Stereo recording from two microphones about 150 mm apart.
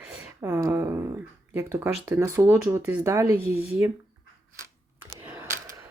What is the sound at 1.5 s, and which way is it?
Speech, 15° right (ahead or behind).